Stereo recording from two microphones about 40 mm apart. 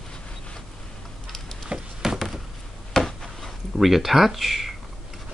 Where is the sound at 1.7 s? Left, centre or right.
Right.